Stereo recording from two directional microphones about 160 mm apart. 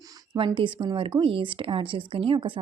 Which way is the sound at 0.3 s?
35° right (ahead or behind).